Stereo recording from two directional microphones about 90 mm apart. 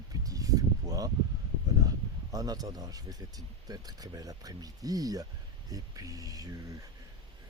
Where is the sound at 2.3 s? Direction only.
45° right (ahead or behind).